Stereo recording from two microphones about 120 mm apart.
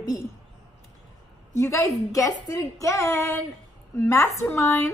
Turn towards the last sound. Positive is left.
turn(degrees=20)  # may be behind; listen again after turning